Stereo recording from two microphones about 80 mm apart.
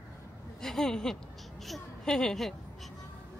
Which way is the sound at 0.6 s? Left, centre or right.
Centre.